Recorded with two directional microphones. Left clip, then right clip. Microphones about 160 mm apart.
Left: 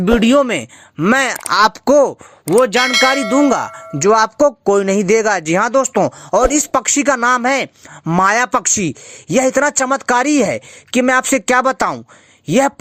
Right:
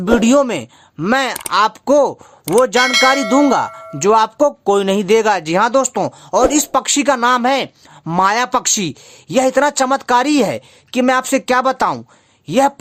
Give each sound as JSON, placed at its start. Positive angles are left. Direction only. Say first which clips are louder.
{"t": 0.0, "sound": "speech", "louder": "even", "side_deg": 5}
{"t": 1.5, "sound": "speech", "louder": "left 2 dB", "side_deg": 35}
{"t": 2.4, "sound": "speech", "louder": "even", "side_deg": 0}
{"t": 3.9, "sound": "speech", "louder": "left 1 dB", "side_deg": 20}